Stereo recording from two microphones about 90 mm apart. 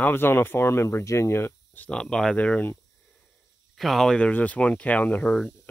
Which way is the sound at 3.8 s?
Centre (ahead or behind).